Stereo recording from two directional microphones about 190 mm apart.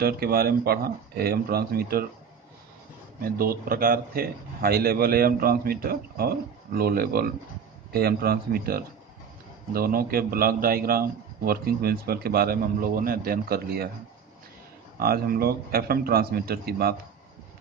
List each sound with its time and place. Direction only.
0.0 s a man's voice: 55° right (ahead or behind)
3.2 s a man's voice: 50° right (ahead or behind)
15.0 s a man's voice: 50° right (ahead or behind)